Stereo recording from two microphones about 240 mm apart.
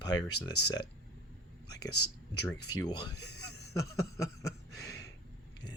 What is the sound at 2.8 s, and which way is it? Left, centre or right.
Speech, centre.